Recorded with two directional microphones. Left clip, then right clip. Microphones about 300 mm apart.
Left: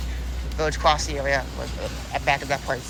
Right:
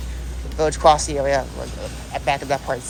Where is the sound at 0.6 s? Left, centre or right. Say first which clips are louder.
Right 6 dB; centre.